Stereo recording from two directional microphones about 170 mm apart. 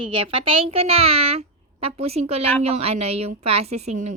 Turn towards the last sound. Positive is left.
turn(degrees=-40)  # may be behind; listen again after turning